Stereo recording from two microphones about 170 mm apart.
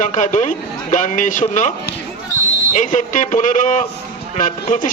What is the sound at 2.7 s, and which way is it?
A man's voice, 50° left (ahead or behind).